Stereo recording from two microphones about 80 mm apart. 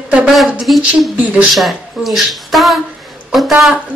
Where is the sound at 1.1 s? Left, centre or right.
Centre.